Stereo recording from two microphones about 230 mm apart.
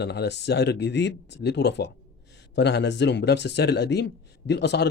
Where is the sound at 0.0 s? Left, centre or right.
Left.